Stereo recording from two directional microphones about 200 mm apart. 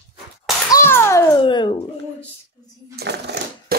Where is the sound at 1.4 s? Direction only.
25° left (ahead or behind).